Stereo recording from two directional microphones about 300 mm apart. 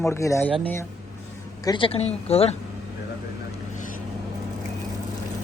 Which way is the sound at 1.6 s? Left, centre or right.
Centre.